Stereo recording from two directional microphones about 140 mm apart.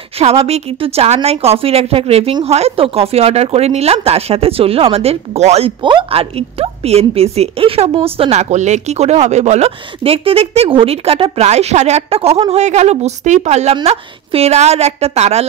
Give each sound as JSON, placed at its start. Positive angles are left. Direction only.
{"t": 0.2, "sound": "a woman's voice", "side_deg": -50}
{"t": 5.8, "sound": "a woman's voice", "side_deg": -35}